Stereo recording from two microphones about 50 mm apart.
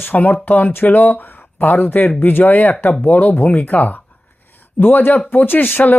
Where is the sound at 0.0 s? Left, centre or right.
Left.